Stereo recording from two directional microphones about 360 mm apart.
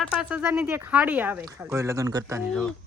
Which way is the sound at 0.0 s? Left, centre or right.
Centre.